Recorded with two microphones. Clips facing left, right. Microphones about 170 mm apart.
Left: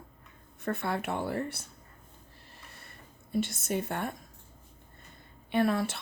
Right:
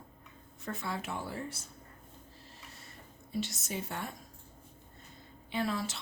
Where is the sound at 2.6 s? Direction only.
60° left (ahead or behind).